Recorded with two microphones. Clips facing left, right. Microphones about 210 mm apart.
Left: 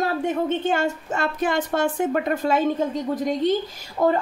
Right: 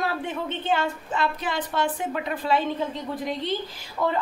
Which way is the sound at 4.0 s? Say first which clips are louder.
Left 6 dB; 40° left (ahead or behind).